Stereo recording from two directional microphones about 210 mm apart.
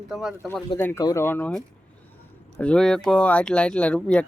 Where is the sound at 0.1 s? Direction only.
Centre (ahead or behind).